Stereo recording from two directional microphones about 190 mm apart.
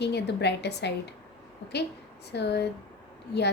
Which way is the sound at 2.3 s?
60° left (ahead or behind).